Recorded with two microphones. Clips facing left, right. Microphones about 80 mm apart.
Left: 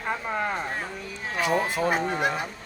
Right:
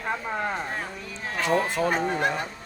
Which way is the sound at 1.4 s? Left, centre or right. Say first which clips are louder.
Right 1 dB; centre.